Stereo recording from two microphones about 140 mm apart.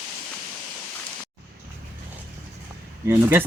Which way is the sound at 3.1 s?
15° right (ahead or behind).